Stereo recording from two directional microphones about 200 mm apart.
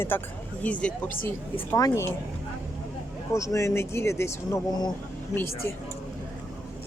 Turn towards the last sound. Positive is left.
turn(degrees=15)  # may be behind; listen again after turning